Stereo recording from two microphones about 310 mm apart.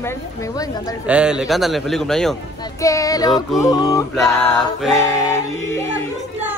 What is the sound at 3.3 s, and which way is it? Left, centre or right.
A man's voice, centre.